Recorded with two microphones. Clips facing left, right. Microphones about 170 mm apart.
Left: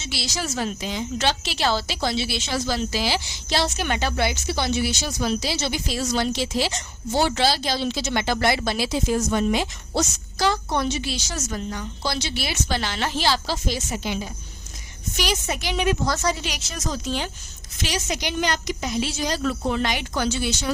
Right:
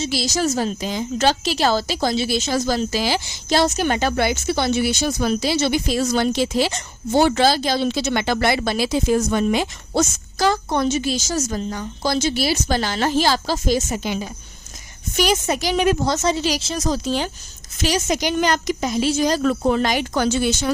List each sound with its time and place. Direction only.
0.0 s a woman's voice: 40° right (ahead or behind)
16.0 s a woman's voice: 25° right (ahead or behind); by 20.7 s 50° right (ahead or behind)